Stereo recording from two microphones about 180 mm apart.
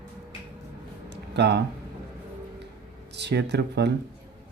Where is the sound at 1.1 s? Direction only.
70° right (ahead or behind).